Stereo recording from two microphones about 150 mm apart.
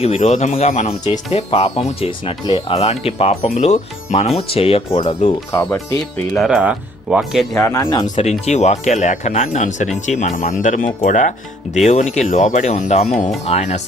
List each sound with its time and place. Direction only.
0.0 s speech: 45° left (ahead or behind)
2.7 s speech: 45° left (ahead or behind)
5.5 s speech: 20° left (ahead or behind)
6.3 s speech: centre (ahead or behind)
7.6 s speech: 20° left (ahead or behind)
8.0 s speech: 50° left (ahead or behind)